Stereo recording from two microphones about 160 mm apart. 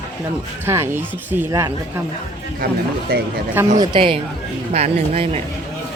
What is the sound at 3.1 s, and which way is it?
Speech, 70° right (ahead or behind).